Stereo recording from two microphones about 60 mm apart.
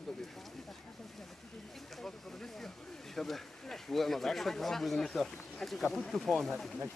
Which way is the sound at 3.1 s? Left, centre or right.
Centre.